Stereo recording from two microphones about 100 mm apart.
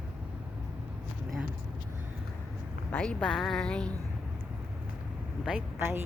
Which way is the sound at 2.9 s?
10° left (ahead or behind).